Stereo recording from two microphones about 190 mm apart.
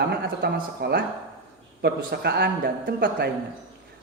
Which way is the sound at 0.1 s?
55° right (ahead or behind).